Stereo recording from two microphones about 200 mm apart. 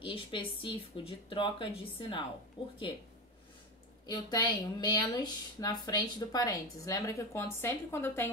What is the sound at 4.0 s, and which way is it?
Speech, 20° left (ahead or behind).